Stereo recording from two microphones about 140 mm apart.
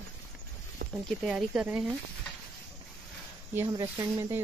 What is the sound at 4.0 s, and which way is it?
Speech, 20° right (ahead or behind).